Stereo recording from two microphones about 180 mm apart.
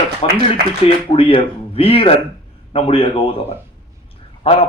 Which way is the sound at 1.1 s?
30° left (ahead or behind).